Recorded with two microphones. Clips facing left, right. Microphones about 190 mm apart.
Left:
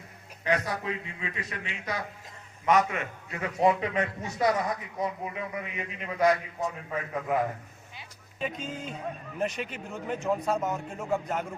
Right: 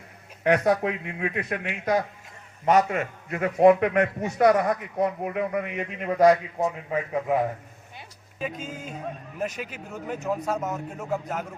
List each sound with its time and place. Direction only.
0.4 s a man's voice: 60° right (ahead or behind); by 6.7 s 40° right (ahead or behind)
8.4 s speech: 5° right (ahead or behind)